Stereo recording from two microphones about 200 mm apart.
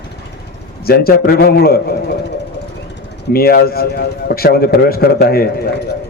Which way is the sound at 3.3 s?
50° left (ahead or behind).